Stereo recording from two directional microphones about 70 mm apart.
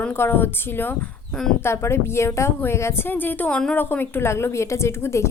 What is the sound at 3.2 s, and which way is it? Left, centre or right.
A woman's voice, left.